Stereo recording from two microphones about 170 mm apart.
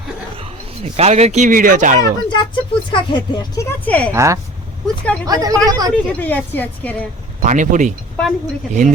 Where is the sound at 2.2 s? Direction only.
25° left (ahead or behind).